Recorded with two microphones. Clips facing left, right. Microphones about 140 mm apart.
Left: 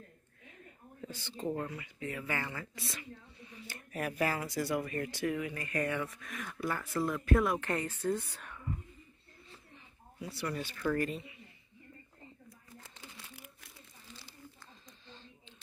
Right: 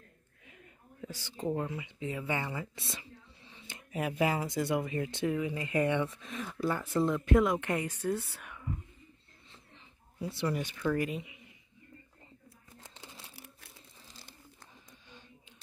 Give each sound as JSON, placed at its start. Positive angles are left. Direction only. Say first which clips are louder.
{"t": 1.0, "sound": "a woman's voice", "louder": "right 2 dB", "side_deg": -10}
{"t": 10.1, "sound": "speech", "louder": "right 4 dB", "side_deg": -25}
{"t": 12.9, "sound": "crumpling", "louder": "right 3 dB", "side_deg": -30}
{"t": 15.0, "sound": "a sound", "louder": "left 3 dB", "side_deg": -15}